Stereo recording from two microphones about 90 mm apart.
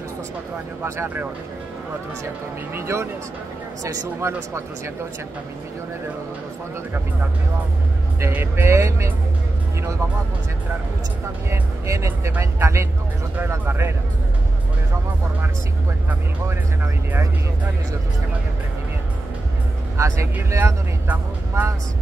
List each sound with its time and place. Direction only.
0.8 s speech: 25° right (ahead or behind)
2.7 s speech: 30° right (ahead or behind)
8.2 s speech: 25° right (ahead or behind)
11.5 s speech: 35° right (ahead or behind)
16.4 s speech: 30° right (ahead or behind)
20.0 s speech: 35° right (ahead or behind)